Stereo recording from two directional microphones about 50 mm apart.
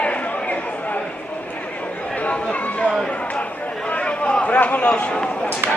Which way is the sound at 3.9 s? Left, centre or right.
Left.